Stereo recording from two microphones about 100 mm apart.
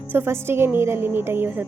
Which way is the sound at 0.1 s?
20° right (ahead or behind).